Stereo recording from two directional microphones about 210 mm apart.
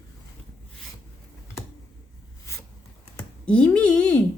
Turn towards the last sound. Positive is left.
turn(degrees=5)  # may be behind; listen again after turning